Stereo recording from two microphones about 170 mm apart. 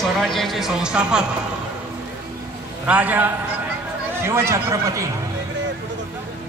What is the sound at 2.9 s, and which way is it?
A man's voice, 10° right (ahead or behind).